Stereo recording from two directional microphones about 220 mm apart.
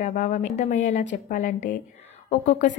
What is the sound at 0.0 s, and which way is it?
A woman's voice, 35° left (ahead or behind).